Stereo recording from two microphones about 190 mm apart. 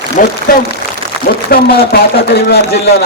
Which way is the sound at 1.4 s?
55° left (ahead or behind).